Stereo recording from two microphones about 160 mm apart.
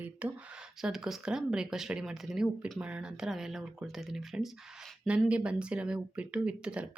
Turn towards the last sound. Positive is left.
turn(degrees=-5)  # may be behind; listen again after turning